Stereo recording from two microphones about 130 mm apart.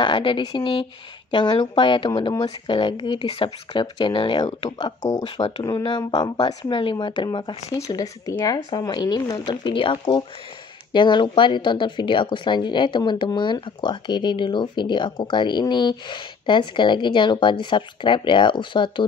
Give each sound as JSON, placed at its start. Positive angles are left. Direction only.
{"t": 0.0, "sound": "speech", "side_deg": 40}